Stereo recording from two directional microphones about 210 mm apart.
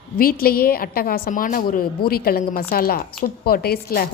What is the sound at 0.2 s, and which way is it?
A woman's voice, 45° left (ahead or behind).